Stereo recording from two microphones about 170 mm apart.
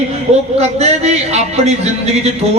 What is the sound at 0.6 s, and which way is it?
A man's voice, 40° right (ahead or behind).